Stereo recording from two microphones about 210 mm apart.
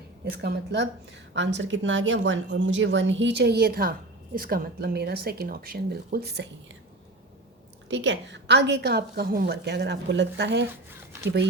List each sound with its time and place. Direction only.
0.3 s a woman's voice: 50° right (ahead or behind)
7.9 s a woman's voice: 60° right (ahead or behind)